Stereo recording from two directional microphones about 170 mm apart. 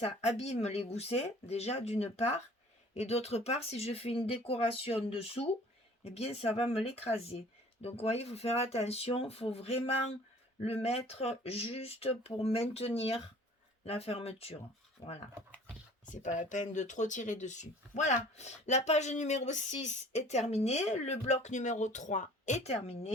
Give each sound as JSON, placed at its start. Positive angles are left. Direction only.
{"t": 0.0, "sound": "speech", "side_deg": 40}
{"t": 16.0, "sound": "speech", "side_deg": 45}